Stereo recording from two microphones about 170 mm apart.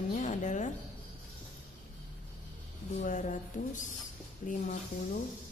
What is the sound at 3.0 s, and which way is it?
A woman's voice, 50° left (ahead or behind).